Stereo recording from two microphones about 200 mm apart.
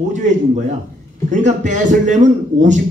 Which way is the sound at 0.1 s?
35° right (ahead or behind).